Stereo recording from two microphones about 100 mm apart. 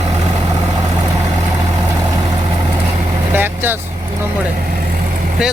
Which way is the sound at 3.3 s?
20° right (ahead or behind).